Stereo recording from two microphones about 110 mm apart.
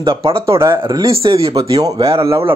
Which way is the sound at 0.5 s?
25° right (ahead or behind).